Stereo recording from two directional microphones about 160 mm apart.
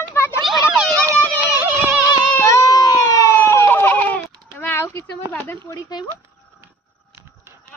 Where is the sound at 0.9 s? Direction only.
20° right (ahead or behind).